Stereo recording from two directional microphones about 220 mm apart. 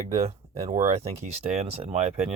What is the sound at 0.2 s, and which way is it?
Speech, 30° right (ahead or behind).